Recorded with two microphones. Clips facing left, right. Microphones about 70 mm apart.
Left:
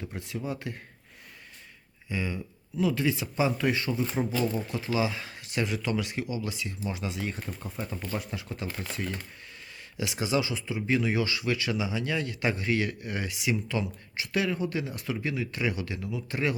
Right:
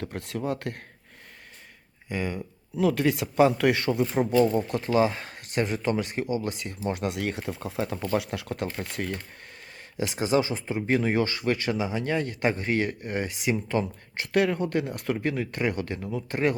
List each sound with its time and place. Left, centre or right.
0.0 s speech: right
2.0 s speech: right
4.1 s speech: right
10.0 s speech: right